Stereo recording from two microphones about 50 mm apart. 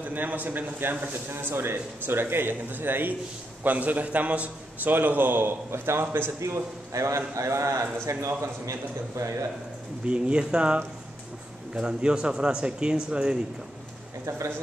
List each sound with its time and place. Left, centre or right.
0.0 s a man's voice: right
3.6 s a man's voice: right
4.9 s a man's voice: right
6.4 s a man's voice: right
10.0 s speech: right